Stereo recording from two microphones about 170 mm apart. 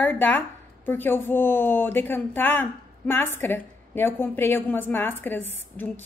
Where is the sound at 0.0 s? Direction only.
10° left (ahead or behind).